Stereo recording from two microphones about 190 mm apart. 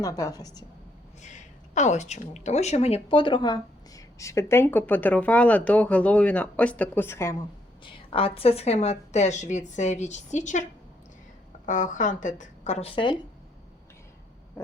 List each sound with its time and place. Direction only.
0.0 s a woman's voice: 20° left (ahead or behind)
1.7 s speech: 40° left (ahead or behind); by 7.3 s 15° left (ahead or behind)
7.9 s a woman's voice: 30° left (ahead or behind)